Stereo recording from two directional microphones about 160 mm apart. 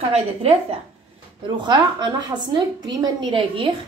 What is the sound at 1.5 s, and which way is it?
A woman's voice, 30° right (ahead or behind).